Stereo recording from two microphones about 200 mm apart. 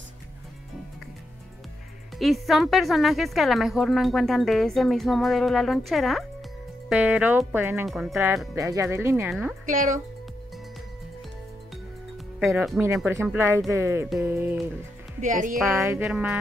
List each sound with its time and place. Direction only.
2.1 s a woman's voice: centre (ahead or behind)
9.7 s a woman's voice: 40° right (ahead or behind)
12.8 s speech: 15° right (ahead or behind)
15.1 s a woman's voice: 40° right (ahead or behind)
15.8 s speech: 5° right (ahead or behind)